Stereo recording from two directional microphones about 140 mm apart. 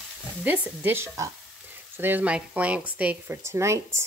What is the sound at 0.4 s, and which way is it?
Speech, 10° right (ahead or behind).